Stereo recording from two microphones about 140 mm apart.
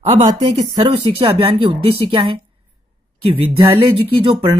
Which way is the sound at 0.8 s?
45° right (ahead or behind).